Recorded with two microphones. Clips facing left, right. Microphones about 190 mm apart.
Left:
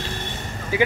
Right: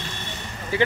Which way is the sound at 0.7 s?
10° left (ahead or behind).